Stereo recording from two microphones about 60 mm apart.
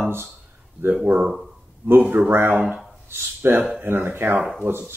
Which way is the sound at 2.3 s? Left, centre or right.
Right.